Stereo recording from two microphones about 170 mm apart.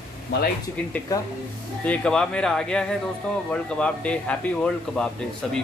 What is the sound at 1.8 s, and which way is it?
A man's voice, 5° left (ahead or behind).